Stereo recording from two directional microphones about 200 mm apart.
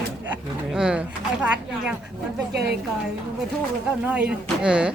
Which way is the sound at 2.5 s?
55° right (ahead or behind).